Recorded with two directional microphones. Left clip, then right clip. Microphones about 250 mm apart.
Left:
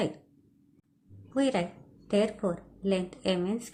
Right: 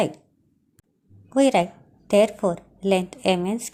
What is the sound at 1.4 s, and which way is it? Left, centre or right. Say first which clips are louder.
A woman's voice: right 10 dB; right.